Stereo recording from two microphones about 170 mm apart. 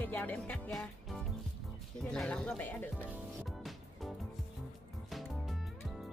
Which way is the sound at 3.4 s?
Centre (ahead or behind).